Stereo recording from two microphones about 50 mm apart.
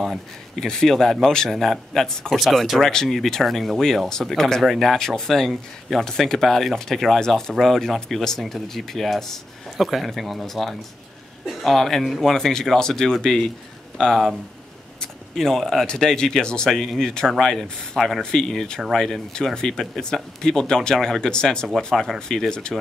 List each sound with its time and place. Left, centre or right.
0.0 s speech: centre
18.8 s speech: centre
19.3 s speech: centre
21.9 s speech: centre